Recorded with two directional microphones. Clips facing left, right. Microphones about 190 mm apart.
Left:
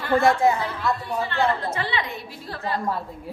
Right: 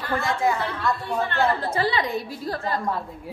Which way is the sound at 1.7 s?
35° right (ahead or behind).